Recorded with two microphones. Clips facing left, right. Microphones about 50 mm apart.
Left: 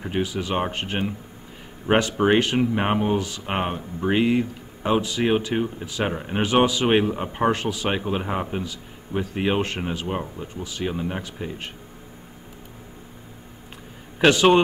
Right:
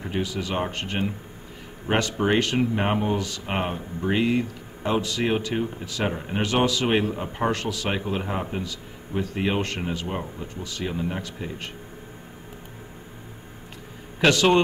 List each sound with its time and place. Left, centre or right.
0.0 s a man's voice: centre
14.2 s a man's voice: centre